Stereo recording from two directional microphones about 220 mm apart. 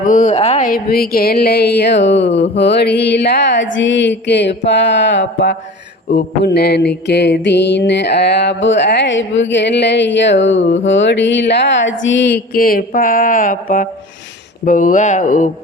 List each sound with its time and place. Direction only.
0.0 s mantra: 35° left (ahead or behind)
14.6 s speech: 35° left (ahead or behind)